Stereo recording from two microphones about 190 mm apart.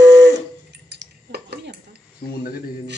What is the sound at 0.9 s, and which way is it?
Dishes, 60° right (ahead or behind).